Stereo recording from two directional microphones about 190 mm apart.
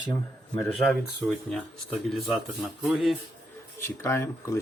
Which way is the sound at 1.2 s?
Centre (ahead or behind).